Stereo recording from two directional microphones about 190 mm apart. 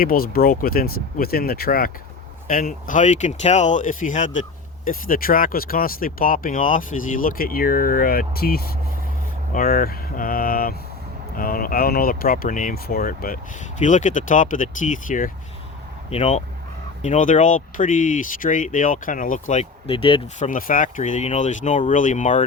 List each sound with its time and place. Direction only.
0.0 s speech: 50° left (ahead or behind)
16.0 s speech: 30° left (ahead or behind)
20.4 s speech: 45° left (ahead or behind)